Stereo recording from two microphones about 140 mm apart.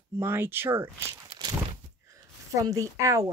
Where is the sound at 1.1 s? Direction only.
30° right (ahead or behind).